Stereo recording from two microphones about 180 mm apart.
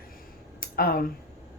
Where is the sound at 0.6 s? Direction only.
55° left (ahead or behind).